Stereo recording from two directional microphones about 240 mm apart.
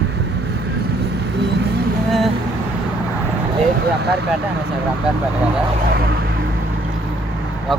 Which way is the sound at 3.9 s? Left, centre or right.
Right.